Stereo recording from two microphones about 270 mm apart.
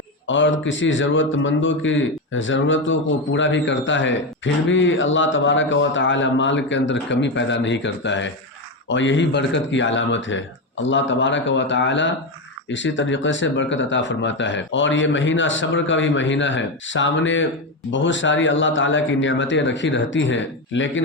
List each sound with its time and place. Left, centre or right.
0.3 s a man's voice: left